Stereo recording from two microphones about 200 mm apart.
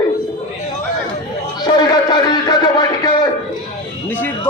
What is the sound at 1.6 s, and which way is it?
Music, 20° left (ahead or behind).